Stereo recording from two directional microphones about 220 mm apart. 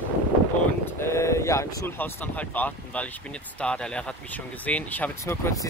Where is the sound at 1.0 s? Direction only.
15° left (ahead or behind).